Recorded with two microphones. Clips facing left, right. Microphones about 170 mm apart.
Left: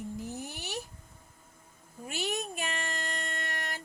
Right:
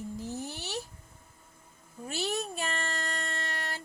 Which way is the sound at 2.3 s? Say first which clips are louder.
Right 2 dB; 15° left (ahead or behind).